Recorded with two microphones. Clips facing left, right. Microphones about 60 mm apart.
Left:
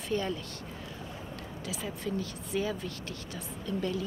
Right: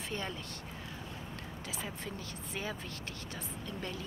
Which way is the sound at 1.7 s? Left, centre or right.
Right.